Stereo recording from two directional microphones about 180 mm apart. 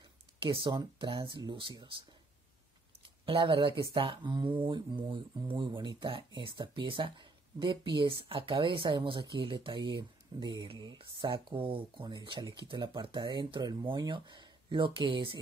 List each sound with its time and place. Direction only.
0.4 s speech: 30° right (ahead or behind)
3.0 s speech: 30° right (ahead or behind)